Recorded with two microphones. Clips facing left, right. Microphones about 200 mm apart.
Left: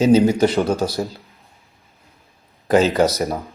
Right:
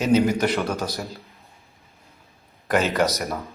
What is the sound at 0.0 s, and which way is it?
Speech, 30° left (ahead or behind).